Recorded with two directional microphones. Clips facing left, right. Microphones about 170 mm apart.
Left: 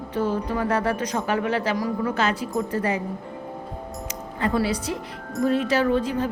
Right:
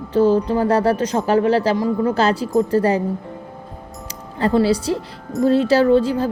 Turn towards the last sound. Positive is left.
turn(degrees=-30)  # may be behind; listen again after turning